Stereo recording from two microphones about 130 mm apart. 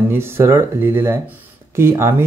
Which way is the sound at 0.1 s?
20° right (ahead or behind).